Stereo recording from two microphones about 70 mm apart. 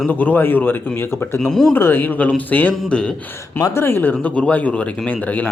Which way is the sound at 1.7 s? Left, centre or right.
Left.